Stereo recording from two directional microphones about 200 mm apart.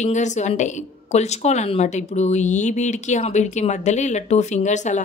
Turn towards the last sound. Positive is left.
turn(degrees=35)  # may be behind; listen again after turning